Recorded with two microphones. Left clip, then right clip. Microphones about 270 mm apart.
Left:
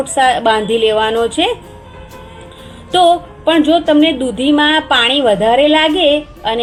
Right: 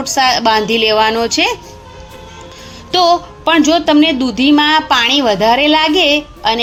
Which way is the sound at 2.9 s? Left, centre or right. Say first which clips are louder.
Left 1 dB; right.